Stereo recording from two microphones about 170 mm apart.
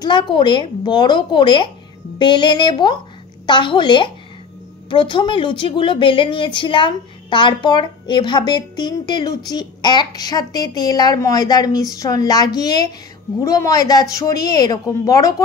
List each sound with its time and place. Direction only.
0.0 s a woman's voice: 30° left (ahead or behind)